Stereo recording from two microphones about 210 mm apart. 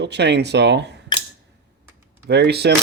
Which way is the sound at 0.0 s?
55° right (ahead or behind).